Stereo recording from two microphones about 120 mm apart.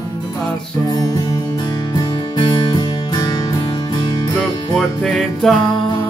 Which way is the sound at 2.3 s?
45° left (ahead or behind).